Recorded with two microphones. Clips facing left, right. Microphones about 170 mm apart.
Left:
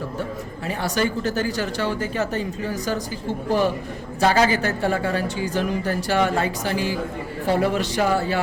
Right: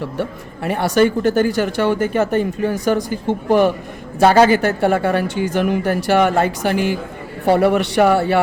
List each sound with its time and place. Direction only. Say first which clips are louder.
0.2 s speech: right 5 dB; 65° right (ahead or behind)